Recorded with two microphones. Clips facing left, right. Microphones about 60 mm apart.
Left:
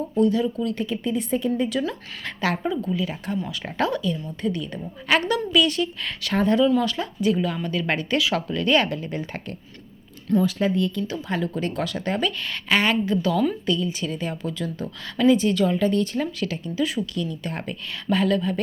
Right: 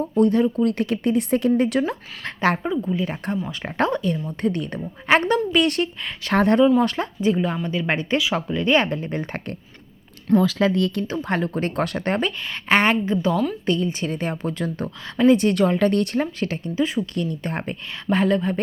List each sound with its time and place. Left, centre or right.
0.2 s a woman's voice: right
0.7 s speech: right
1.9 s speech: right
4.3 s a woman's voice: right
5.0 s speech: right
5.6 s a woman's voice: right
6.8 s speech: right
10.3 s speech: right
11.1 s a woman's voice: right
13.3 s speech: centre
13.7 s a woman's voice: right
16.2 s speech: right
17.2 s speech: right